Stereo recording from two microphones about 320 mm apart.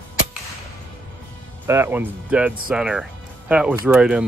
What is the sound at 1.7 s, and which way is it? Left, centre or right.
Speech, centre.